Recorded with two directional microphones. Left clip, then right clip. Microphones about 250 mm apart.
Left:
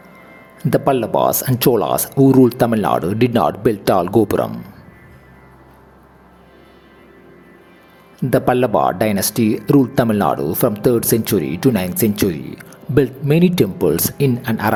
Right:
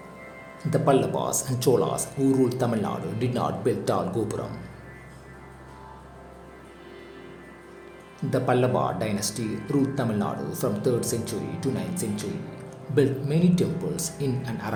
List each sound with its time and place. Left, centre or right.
0.7 s speech: left
8.3 s speech: left